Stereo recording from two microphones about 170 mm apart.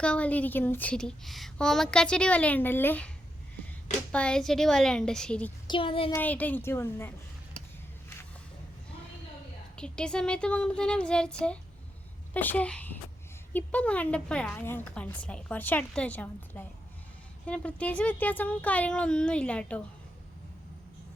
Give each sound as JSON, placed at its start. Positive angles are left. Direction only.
{"t": 0.0, "sound": "a woman's voice", "side_deg": 5}
{"t": 4.1, "sound": "speech", "side_deg": 5}
{"t": 5.6, "sound": "speech", "side_deg": 30}
{"t": 6.1, "sound": "a woman's voice", "side_deg": 10}
{"t": 9.7, "sound": "a woman's voice", "side_deg": 5}